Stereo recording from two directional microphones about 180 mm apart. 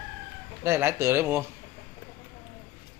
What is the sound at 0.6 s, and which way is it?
Speech, 15° right (ahead or behind).